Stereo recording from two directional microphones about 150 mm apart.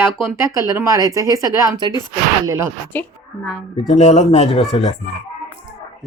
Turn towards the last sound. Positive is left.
turn(degrees=45)  # may be behind; listen again after turning